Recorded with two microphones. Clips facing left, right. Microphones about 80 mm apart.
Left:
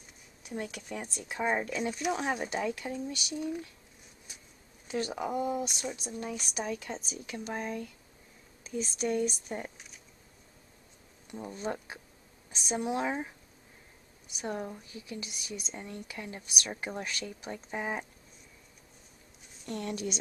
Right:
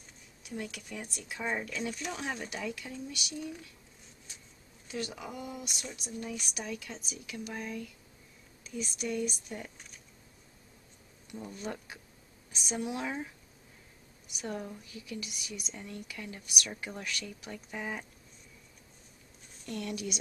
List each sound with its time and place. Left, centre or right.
0.4 s speech: left
2.4 s speech: left
4.3 s a sound: centre
4.9 s speech: left
11.2 s speech: left
19.6 s speech: left